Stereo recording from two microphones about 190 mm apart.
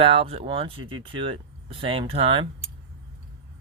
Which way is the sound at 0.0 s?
30° right (ahead or behind).